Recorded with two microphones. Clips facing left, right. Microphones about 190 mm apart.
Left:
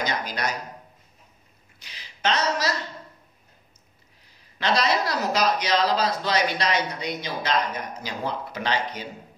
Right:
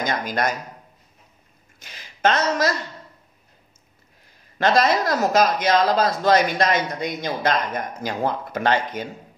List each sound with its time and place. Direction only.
0.0 s speech: 50° right (ahead or behind)
1.8 s speech: 50° right (ahead or behind)
4.6 s speech: 50° right (ahead or behind)